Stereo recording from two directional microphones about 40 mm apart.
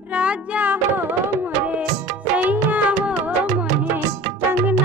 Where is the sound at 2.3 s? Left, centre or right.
Right.